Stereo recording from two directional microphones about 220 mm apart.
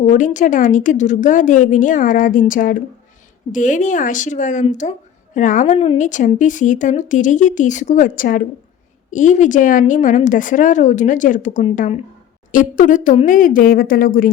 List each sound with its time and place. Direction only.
0.1 s a woman's voice: 35° left (ahead or behind)